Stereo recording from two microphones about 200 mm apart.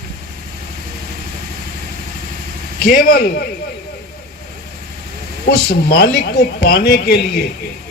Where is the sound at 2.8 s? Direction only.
50° left (ahead or behind).